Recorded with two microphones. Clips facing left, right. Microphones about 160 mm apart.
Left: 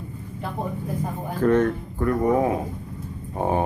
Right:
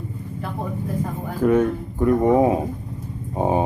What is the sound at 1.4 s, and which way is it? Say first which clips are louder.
Speech: right 1 dB; 10° right (ahead or behind).